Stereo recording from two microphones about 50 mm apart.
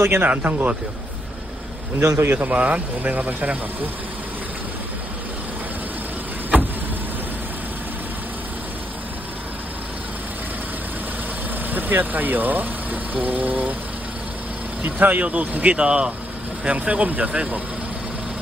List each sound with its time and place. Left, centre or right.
0.0 s a man's voice: right
0.3 s speech: right
2.0 s a man's voice: right
2.3 s speech: right
11.7 s speech: right
14.8 s speech: right